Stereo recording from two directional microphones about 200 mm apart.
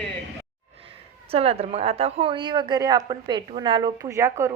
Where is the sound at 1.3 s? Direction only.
30° right (ahead or behind).